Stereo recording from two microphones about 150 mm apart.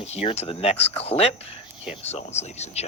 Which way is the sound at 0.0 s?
45° left (ahead or behind).